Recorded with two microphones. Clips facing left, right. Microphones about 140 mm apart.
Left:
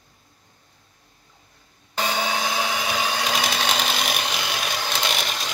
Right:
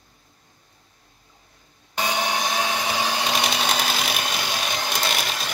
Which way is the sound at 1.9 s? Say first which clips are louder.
Even; 15° right (ahead or behind).